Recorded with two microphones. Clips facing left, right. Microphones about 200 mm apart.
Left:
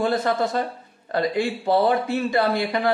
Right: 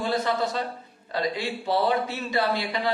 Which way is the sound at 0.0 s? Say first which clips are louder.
Left 4 dB; 50° left (ahead or behind).